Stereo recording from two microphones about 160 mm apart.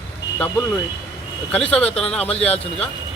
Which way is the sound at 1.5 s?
5° left (ahead or behind).